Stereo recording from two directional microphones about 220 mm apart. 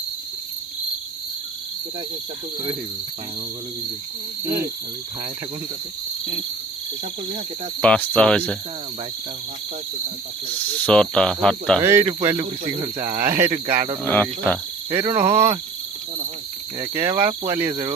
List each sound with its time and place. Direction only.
4.4 s speech: 10° right (ahead or behind)
7.8 s speech: 5° left (ahead or behind)
10.8 s speech: 5° left (ahead or behind)
11.8 s speech: 10° right (ahead or behind)
14.0 s speech: 10° left (ahead or behind)
14.9 s speech: 10° right (ahead or behind)
16.8 s speech: 15° right (ahead or behind)